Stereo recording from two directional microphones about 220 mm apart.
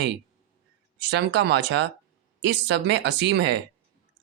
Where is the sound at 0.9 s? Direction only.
50° right (ahead or behind).